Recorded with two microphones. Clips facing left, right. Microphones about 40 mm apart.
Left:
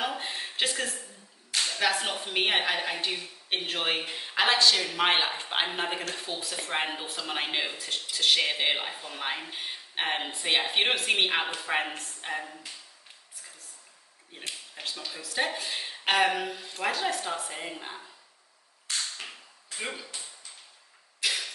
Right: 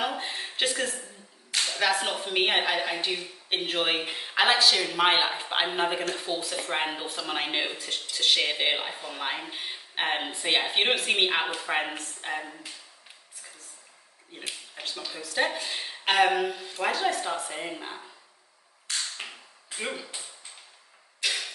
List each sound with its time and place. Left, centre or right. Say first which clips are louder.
0.0 s a sound: right 2 dB; centre
1.5 s a woman's voice: right 1 dB; centre
14.3 s a woman's voice: right 1 dB; centre
19.2 s tap: right 2 dB; centre
19.8 s speech: right 2 dB; centre
21.2 s a sound: even; centre